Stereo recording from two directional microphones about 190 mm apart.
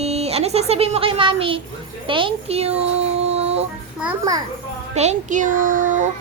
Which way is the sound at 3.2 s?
35° right (ahead or behind).